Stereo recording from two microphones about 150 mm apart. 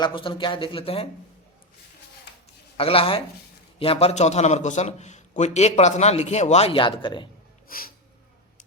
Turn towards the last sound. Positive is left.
turn(degrees=70)  # may be behind; listen again after turning